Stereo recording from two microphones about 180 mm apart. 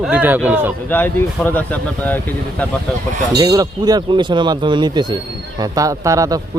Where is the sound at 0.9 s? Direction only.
10° left (ahead or behind).